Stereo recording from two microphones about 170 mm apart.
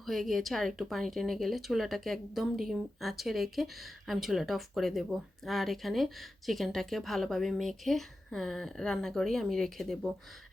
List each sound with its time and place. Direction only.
0.0 s speech: centre (ahead or behind)